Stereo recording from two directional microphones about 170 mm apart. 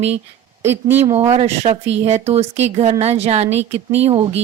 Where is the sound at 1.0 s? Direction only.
35° right (ahead or behind).